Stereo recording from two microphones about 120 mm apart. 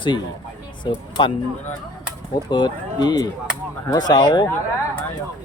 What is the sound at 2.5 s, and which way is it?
Speech, 35° left (ahead or behind).